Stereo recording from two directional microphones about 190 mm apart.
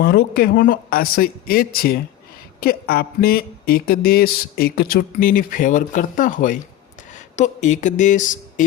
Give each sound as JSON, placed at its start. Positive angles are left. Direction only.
{"t": 0.0, "sound": "speech", "side_deg": 55}